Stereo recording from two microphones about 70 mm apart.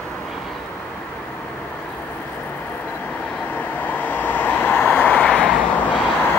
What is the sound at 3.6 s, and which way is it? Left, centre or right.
Vehicle, left.